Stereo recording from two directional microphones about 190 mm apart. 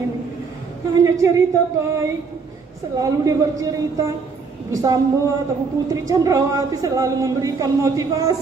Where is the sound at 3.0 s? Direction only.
20° right (ahead or behind).